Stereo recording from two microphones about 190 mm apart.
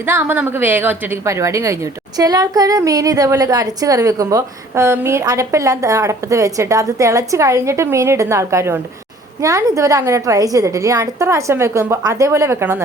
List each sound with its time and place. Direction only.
0.0 s a woman's voice: 10° right (ahead or behind)